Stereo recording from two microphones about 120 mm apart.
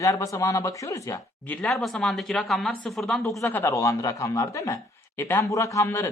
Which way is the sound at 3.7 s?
25° left (ahead or behind).